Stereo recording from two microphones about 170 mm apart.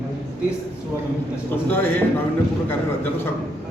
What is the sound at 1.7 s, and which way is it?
Speech, 15° left (ahead or behind).